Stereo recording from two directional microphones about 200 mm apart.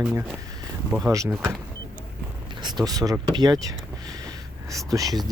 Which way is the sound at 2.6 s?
20° right (ahead or behind).